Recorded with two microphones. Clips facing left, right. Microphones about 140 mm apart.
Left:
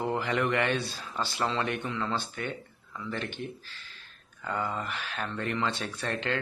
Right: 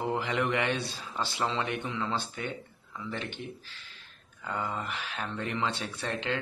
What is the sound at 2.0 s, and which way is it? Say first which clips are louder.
Speech: left 1 dB; 20° right (ahead or behind).